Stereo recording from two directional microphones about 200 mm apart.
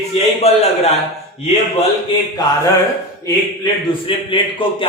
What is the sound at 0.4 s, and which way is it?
Speech, 30° left (ahead or behind).